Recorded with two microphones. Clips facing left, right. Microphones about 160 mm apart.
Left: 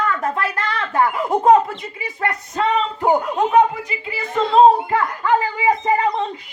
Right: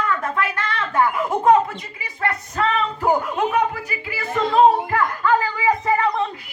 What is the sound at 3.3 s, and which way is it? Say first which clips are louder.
Speech: left 5 dB; 25° left (ahead or behind).